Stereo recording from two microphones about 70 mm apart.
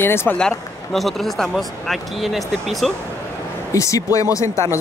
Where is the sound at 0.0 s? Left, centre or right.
Left.